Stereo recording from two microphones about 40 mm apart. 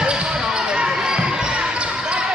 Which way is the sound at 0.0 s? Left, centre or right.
Right.